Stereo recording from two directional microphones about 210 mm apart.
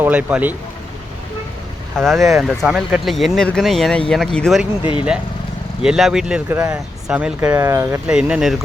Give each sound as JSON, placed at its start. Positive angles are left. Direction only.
{"t": 0.0, "sound": "speech", "side_deg": -5}
{"t": 2.0, "sound": "speech", "side_deg": 0}
{"t": 4.8, "sound": "speech", "side_deg": 25}
{"t": 5.8, "sound": "speech", "side_deg": -5}